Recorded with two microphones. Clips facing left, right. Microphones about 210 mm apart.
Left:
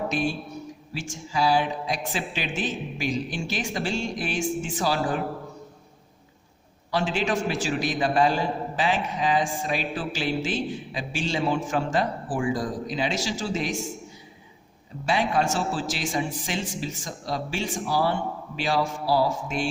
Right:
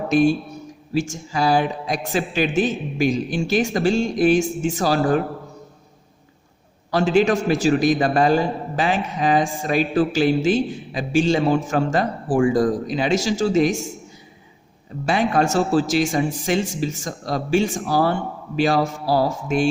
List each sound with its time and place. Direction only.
0.1 s a man's voice: 45° right (ahead or behind)
6.9 s a man's voice: 45° right (ahead or behind)
15.0 s a man's voice: 45° right (ahead or behind)